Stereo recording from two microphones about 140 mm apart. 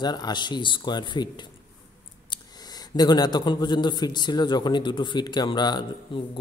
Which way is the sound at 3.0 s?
30° left (ahead or behind).